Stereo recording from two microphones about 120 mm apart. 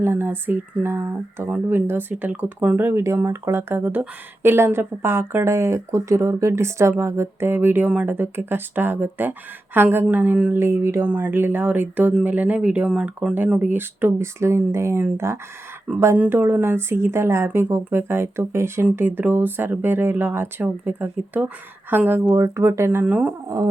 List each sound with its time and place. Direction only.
0.0 s a woman's voice: 20° right (ahead or behind)
22.4 s speech: 25° right (ahead or behind)